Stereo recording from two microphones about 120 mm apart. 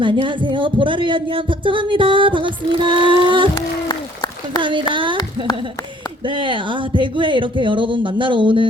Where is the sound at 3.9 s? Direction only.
35° left (ahead or behind).